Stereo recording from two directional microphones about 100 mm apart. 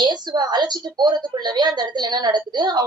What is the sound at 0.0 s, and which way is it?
A woman's voice, 45° right (ahead or behind).